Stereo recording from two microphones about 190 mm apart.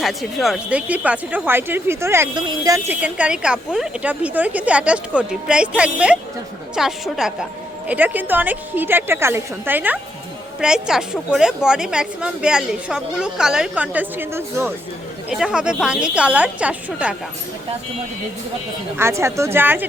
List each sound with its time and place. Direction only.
0.0 s a woman's voice: centre (ahead or behind)
18.9 s speech: 15° right (ahead or behind)